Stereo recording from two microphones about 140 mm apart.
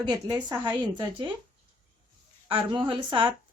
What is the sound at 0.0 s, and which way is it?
Speech, 30° right (ahead or behind).